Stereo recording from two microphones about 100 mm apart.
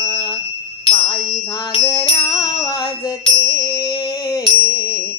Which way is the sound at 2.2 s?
40° left (ahead or behind).